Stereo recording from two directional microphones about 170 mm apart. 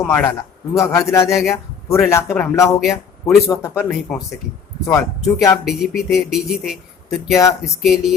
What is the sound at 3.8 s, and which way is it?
Speech, 10° left (ahead or behind).